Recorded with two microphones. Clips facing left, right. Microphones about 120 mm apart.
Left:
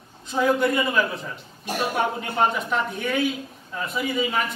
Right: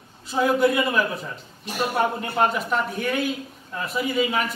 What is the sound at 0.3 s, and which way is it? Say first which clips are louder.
A man's voice: right 1 dB; 5° right (ahead or behind).